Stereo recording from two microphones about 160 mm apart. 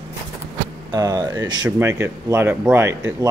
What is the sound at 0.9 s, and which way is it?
Speech, 25° right (ahead or behind).